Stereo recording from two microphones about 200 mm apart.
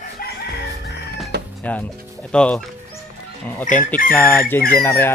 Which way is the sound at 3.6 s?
40° left (ahead or behind).